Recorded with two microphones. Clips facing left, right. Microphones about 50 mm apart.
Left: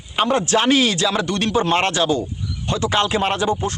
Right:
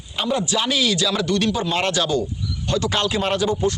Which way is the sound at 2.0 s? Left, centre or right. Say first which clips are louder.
Left 2 dB; left.